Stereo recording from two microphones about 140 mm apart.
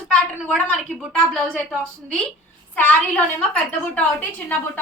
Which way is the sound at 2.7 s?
10° left (ahead or behind).